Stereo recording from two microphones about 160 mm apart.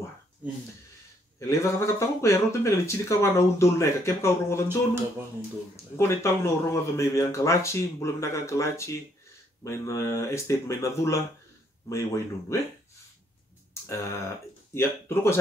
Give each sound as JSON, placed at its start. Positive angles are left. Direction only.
{"t": 1.5, "sound": "speech", "side_deg": 15}
{"t": 5.9, "sound": "speech", "side_deg": 15}
{"t": 13.8, "sound": "speech", "side_deg": 20}